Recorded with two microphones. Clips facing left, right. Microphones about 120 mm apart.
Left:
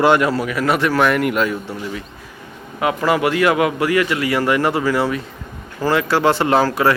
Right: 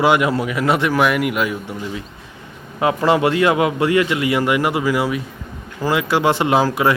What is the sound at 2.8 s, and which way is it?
A man's voice, 25° right (ahead or behind).